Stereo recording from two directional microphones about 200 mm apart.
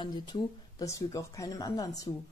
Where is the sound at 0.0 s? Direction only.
20° left (ahead or behind).